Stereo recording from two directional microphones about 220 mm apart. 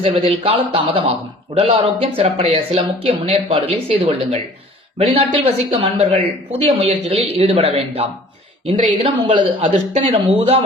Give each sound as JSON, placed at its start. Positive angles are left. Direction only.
{"t": 0.0, "sound": "a man's voice", "side_deg": -25}